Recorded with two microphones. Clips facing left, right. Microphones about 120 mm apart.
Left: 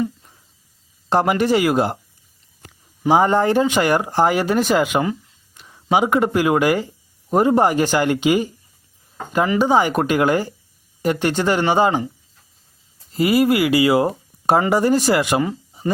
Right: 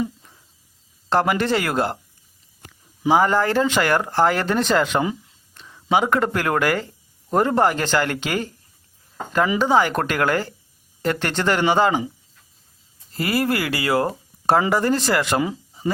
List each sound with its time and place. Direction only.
1.1 s speech: 15° left (ahead or behind)
3.1 s speech: 20° left (ahead or behind)
9.6 s speech: 15° left (ahead or behind)
13.1 s speech: 15° left (ahead or behind)